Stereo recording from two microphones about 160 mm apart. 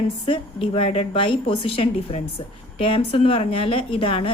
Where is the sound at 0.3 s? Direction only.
35° left (ahead or behind).